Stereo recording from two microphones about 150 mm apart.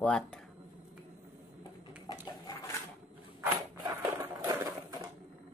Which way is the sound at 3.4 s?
20° right (ahead or behind).